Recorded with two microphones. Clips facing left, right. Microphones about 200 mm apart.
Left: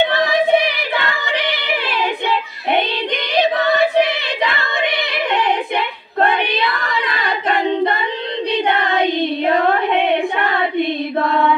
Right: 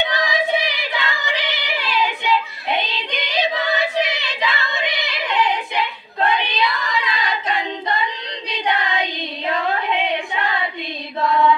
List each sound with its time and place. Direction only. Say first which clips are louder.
0.0 s music: left 6 dB; 55° left (ahead or behind)
8.6 s female singing: left 2 dB; 55° left (ahead or behind)